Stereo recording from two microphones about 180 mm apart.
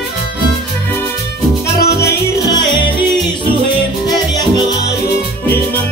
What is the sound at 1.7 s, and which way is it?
Music, 65° left (ahead or behind).